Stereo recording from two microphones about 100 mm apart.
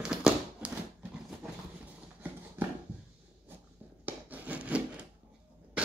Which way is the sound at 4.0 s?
15° right (ahead or behind).